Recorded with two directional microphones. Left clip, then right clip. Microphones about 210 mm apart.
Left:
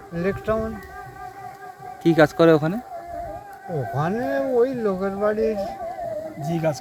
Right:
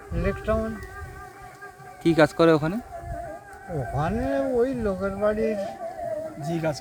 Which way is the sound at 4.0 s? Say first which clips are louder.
Left 2 dB; 15° left (ahead or behind).